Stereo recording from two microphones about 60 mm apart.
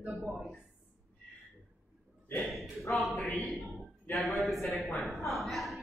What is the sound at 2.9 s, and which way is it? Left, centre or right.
Speech, centre.